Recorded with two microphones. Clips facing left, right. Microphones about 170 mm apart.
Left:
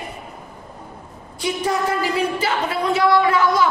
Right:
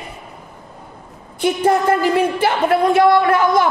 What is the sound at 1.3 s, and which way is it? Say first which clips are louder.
A woman's voice: right 6 dB; 55° right (ahead or behind).